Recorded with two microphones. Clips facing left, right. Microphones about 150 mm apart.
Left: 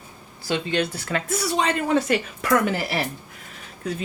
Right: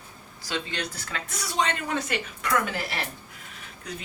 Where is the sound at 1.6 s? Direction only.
35° left (ahead or behind).